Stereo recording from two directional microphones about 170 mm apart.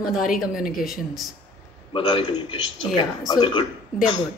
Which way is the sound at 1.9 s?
30° left (ahead or behind).